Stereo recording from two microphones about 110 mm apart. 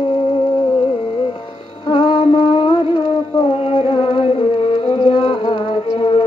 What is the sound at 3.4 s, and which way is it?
Music, 60° left (ahead or behind).